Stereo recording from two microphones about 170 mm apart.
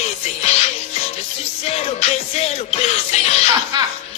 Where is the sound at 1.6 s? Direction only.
40° left (ahead or behind).